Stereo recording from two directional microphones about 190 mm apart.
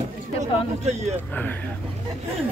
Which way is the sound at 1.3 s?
10° left (ahead or behind).